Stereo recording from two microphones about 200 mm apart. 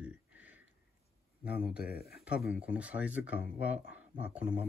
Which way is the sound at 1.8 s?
50° left (ahead or behind).